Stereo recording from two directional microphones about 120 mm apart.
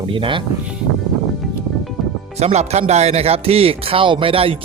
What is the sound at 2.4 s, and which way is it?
Speech, 65° right (ahead or behind).